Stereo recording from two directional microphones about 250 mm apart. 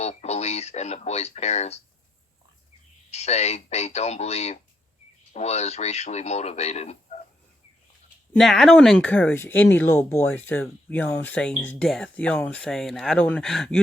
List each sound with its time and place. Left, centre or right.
0.0 s speech: left
3.1 s speech: left
8.3 s speech: centre